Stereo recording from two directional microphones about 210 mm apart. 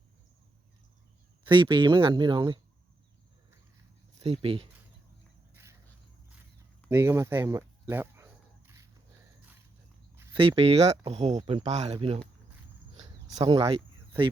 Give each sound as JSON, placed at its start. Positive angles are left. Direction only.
{"t": 1.5, "sound": "speech", "side_deg": -25}
{"t": 4.2, "sound": "speech", "side_deg": -25}
{"t": 6.9, "sound": "a sound", "side_deg": -10}
{"t": 10.3, "sound": "speech", "side_deg": -25}
{"t": 13.0, "sound": "a sound", "side_deg": -35}
{"t": 13.4, "sound": "speech", "side_deg": -25}